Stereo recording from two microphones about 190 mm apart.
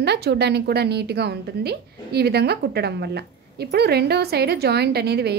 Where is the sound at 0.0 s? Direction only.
60° right (ahead or behind).